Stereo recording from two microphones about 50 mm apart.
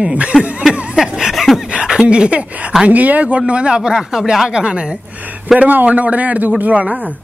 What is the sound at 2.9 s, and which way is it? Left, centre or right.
Speech, right.